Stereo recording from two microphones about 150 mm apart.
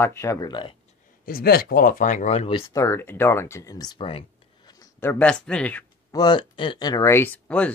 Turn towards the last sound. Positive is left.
turn(degrees=10)  # may be behind; listen again after turning